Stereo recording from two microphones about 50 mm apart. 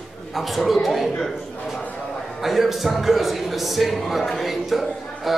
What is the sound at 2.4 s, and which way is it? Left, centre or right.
A man's voice, centre.